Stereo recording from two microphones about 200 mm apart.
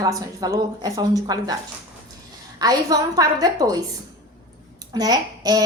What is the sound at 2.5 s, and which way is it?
Speech, 20° right (ahead or behind).